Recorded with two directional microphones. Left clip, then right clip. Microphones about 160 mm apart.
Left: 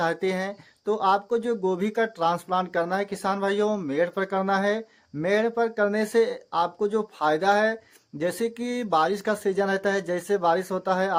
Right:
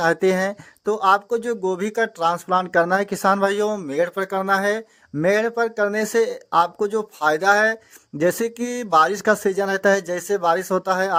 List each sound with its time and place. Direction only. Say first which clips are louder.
0.0 s speech: right 7 dB; 40° right (ahead or behind)